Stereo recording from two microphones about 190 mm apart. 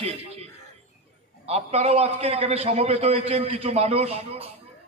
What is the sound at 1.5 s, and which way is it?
A man's voice, 35° right (ahead or behind).